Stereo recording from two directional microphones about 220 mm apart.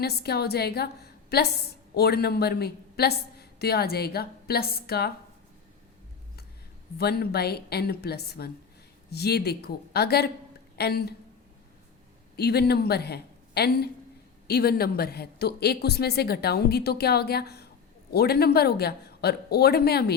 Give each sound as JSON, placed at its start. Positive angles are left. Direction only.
{"t": 0.0, "sound": "a woman's voice", "side_deg": 45}
{"t": 7.0, "sound": "a woman's voice", "side_deg": 45}
{"t": 12.4, "sound": "a woman's voice", "side_deg": 45}